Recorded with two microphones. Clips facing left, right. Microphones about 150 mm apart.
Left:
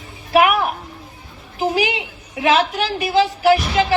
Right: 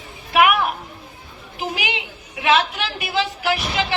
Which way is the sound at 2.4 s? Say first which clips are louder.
Left 2 dB; 40° left (ahead or behind).